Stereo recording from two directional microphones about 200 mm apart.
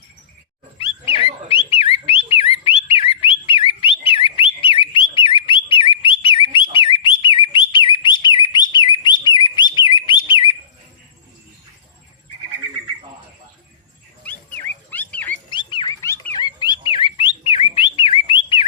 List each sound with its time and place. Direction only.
0.8 s a sound: 25° left (ahead or behind)
4.4 s bird: 25° left (ahead or behind)
14.3 s dog: 10° left (ahead or behind)
15.4 s bird: 25° left (ahead or behind)